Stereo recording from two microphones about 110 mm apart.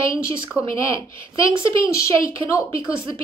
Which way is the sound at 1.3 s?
50° right (ahead or behind).